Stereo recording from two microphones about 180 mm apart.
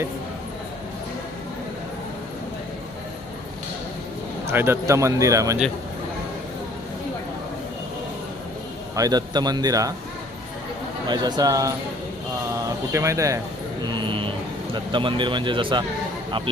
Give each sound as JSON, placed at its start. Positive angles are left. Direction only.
{"t": 4.4, "sound": "speech", "side_deg": -15}
{"t": 9.0, "sound": "speech", "side_deg": -20}
{"t": 11.0, "sound": "speech", "side_deg": -25}
{"t": 13.8, "sound": "a sound", "side_deg": -25}
{"t": 14.7, "sound": "speech", "side_deg": -25}